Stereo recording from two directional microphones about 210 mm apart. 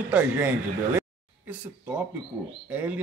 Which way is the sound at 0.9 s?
10° right (ahead or behind).